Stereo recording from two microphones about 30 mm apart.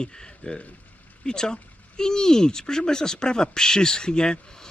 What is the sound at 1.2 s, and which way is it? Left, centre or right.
Speech, left.